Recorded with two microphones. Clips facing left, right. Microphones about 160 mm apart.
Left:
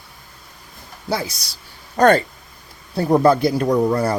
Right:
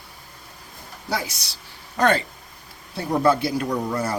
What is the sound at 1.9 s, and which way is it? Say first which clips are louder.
Speech: left 6 dB; 40° left (ahead or behind).